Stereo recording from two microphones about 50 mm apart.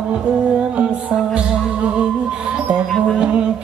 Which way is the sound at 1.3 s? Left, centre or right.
Right.